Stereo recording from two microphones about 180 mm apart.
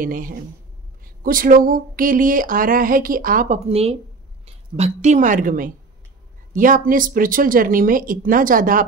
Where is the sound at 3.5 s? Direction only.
35° right (ahead or behind); by 8.8 s 50° right (ahead or behind).